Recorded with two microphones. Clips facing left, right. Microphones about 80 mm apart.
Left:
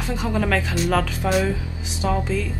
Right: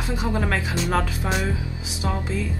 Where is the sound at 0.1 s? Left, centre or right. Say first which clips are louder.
Left 3 dB; centre.